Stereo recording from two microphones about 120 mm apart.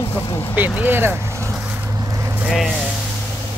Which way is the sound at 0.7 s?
15° right (ahead or behind).